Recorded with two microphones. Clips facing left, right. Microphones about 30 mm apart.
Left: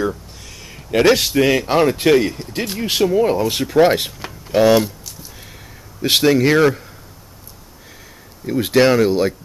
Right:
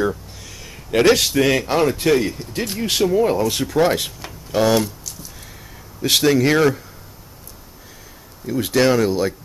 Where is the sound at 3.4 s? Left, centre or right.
Left.